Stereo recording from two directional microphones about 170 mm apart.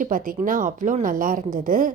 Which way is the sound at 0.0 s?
55° right (ahead or behind).